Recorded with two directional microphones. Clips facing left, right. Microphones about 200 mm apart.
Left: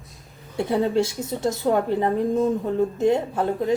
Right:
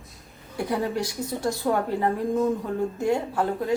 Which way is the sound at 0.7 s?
25° left (ahead or behind).